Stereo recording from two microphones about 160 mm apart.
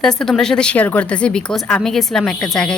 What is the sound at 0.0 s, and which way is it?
Speech, 5° left (ahead or behind).